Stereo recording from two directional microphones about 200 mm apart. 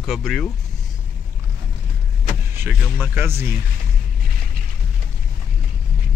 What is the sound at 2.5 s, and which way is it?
Speech, 10° right (ahead or behind).